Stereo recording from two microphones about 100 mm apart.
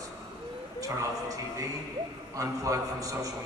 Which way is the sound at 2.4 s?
35° right (ahead or behind).